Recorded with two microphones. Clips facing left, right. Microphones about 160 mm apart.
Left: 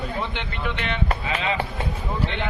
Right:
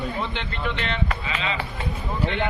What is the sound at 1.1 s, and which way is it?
Speech, 45° left (ahead or behind).